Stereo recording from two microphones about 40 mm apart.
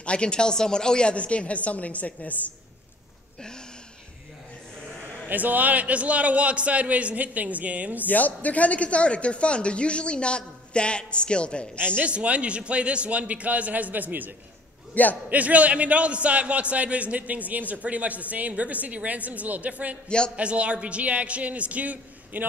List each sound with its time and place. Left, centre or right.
0.0 s a woman's voice: left
5.3 s a man's voice: right
8.0 s speech: left
12.0 s a man's voice: right